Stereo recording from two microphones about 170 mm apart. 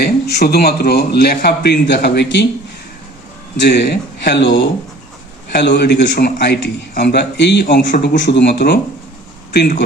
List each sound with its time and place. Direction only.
0.0 s a man's voice: 70° left (ahead or behind)
3.6 s a man's voice: 85° left